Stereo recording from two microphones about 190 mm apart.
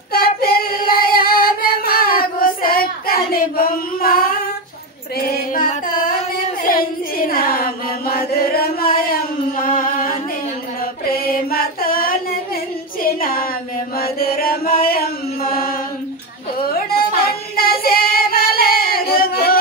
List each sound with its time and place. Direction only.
0.1 s singing: 55° left (ahead or behind)
5.1 s music: 50° left (ahead or behind)
6.6 s chant: 50° left (ahead or behind)
9.6 s music: 45° left (ahead or behind)
11.1 s mantra: 50° left (ahead or behind)
13.0 s a sound: 50° left (ahead or behind)
13.9 s chant: 50° left (ahead or behind)
17.6 s female singing: 50° left (ahead or behind)